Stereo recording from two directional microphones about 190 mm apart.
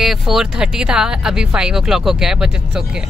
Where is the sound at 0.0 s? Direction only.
Centre (ahead or behind).